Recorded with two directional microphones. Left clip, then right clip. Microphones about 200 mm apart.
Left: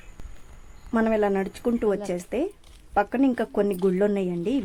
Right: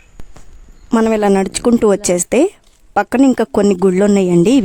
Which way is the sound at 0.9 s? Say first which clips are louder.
Right 10 dB; 60° right (ahead or behind).